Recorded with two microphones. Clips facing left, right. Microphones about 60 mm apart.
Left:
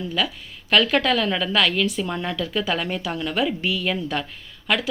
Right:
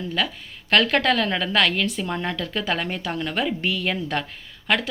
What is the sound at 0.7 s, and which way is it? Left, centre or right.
Speech, right.